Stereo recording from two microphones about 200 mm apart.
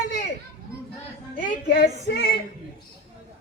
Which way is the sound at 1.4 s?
40° left (ahead or behind).